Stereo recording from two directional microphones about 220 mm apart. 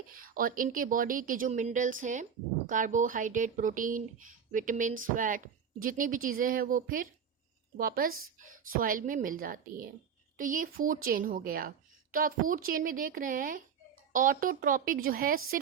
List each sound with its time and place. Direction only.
0.1 s speech: 40° right (ahead or behind)